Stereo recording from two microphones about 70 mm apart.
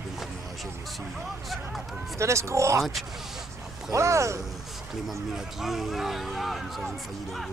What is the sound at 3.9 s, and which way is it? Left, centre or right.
Speech, right.